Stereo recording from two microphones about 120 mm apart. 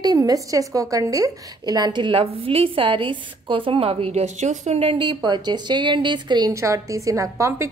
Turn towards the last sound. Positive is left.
turn(degrees=-25)  # may be behind; listen again after turning